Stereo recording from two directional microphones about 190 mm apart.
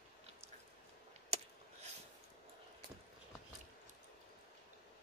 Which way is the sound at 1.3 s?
35° right (ahead or behind).